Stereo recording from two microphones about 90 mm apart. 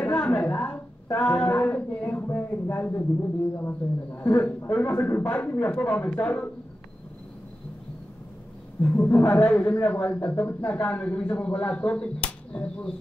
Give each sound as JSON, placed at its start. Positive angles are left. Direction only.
{"t": 0.0, "sound": "a sound", "side_deg": 10}
{"t": 1.1, "sound": "speech", "side_deg": 15}
{"t": 5.2, "sound": "a man's voice", "side_deg": 10}
{"t": 9.0, "sound": "a man's voice", "side_deg": 20}